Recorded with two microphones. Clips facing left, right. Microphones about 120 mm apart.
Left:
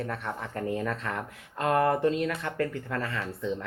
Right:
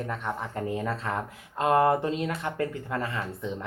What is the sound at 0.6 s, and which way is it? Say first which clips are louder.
Speech: left 2 dB; 20° right (ahead or behind).